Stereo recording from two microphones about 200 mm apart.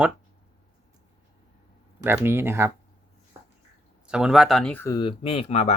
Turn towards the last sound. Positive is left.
turn(degrees=30)  # may be behind; listen again after turning